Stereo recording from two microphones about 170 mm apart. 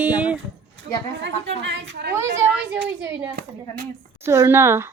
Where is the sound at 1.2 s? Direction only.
90° right.